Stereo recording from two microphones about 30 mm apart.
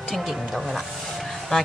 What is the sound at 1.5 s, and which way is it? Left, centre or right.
Speech, centre.